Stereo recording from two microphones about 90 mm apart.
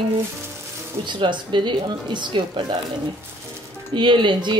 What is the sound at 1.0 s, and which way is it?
Speech, 60° right (ahead or behind).